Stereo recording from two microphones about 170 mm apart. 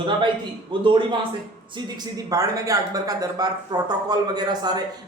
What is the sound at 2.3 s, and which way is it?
Speech, 20° right (ahead or behind).